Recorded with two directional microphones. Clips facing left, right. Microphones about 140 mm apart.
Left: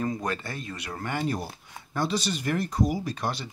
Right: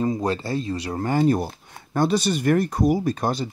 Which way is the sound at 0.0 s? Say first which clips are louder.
Right 6 dB; 25° right (ahead or behind).